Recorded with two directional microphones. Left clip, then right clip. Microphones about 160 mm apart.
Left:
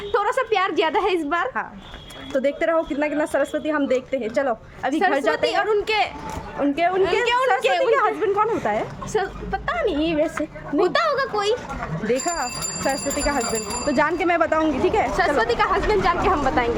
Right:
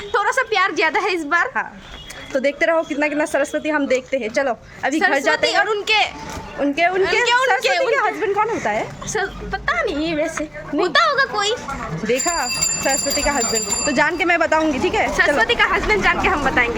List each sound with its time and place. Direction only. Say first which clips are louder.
0.1 s a woman's voice: right 2 dB; 20° left (ahead or behind)
2.3 s a woman's voice: right 3 dB; 5° right (ahead or behind)
5.5 s speech: right 3 dB; 25° left (ahead or behind)
6.6 s speech: right 3 dB; 5° right (ahead or behind)
7.6 s speech: right 2 dB; 25° left (ahead or behind)
7.9 s speech: right 1 dB; 5° left (ahead or behind)
9.1 s speech: right 1 dB; 25° left (ahead or behind)
12.0 s speech: right 3 dB; 5° right (ahead or behind)
15.4 s speech: right 3 dB; 25° left (ahead or behind)